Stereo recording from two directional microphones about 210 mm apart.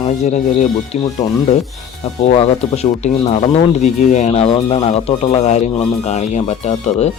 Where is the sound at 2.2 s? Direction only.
30° left (ahead or behind).